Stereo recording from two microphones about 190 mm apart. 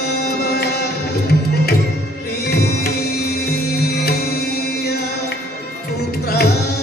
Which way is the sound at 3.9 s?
55° left (ahead or behind).